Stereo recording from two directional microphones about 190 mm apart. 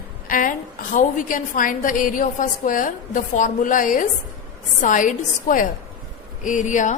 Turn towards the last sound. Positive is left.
turn(degrees=40)  # may be behind; listen again after turning